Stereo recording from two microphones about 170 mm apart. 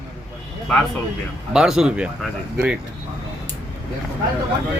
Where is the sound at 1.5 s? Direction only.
5° right (ahead or behind).